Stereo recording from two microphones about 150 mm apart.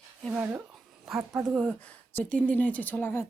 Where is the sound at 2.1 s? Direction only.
10° left (ahead or behind).